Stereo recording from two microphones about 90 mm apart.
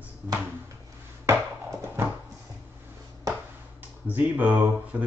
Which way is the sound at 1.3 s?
30° right (ahead or behind).